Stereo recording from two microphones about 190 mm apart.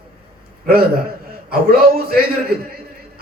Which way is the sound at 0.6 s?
55° right (ahead or behind).